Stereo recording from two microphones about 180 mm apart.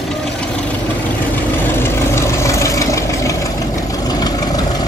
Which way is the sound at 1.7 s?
15° left (ahead or behind).